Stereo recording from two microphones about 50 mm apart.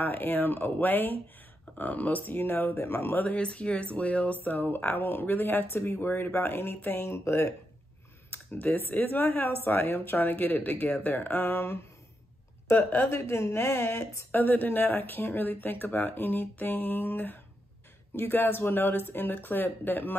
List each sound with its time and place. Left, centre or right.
0.0 s speech: left
3.3 s speech: left
5.8 s speech: left
6.0 s speech: left
8.3 s speech: left
13.1 s speech: left
14.3 s speech: left